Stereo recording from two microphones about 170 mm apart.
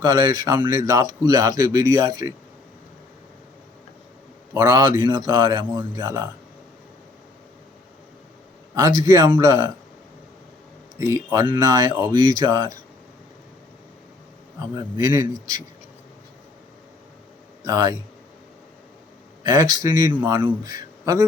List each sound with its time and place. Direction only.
0.0 s speech: 25° right (ahead or behind)
4.5 s speech: 20° right (ahead or behind)
8.7 s speech: 20° right (ahead or behind)
10.9 s speech: 20° right (ahead or behind)
14.8 s speech: 25° right (ahead or behind)
17.7 s speech: 25° right (ahead or behind)
19.4 s speech: 20° right (ahead or behind)